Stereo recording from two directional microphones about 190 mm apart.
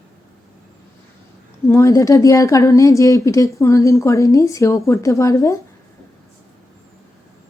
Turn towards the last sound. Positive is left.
turn(degrees=15)  # may be behind; listen again after turning